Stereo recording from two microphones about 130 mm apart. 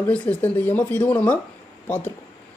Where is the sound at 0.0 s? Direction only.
10° left (ahead or behind).